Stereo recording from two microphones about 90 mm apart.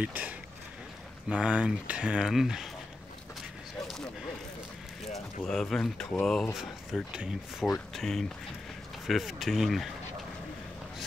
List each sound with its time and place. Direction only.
0.0 s speech: 20° right (ahead or behind)
1.3 s speech: 10° right (ahead or behind)
5.0 s speech: centre (ahead or behind)
7.9 s speech: 5° left (ahead or behind)